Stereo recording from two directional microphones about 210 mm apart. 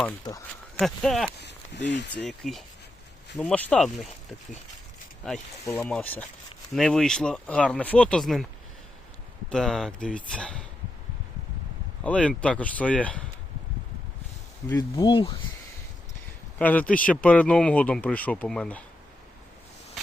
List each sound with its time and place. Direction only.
0.3 s speech: 20° left (ahead or behind)
0.8 s speech: centre (ahead or behind)
1.4 s speech: 55° left (ahead or behind)
2.2 s speech: centre (ahead or behind)
5.6 s speech: 10° left (ahead or behind)
9.5 s speech: centre (ahead or behind)
12.0 s speech: 5° left (ahead or behind)
14.7 s speech: 15° left (ahead or behind)
16.6 s speech: 5° left (ahead or behind)